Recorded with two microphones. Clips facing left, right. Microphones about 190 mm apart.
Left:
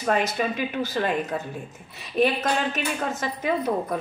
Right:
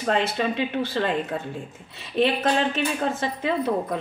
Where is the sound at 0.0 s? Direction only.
30° right (ahead or behind).